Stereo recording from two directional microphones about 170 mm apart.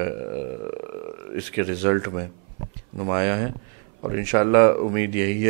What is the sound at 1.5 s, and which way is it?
Speech, 10° right (ahead or behind).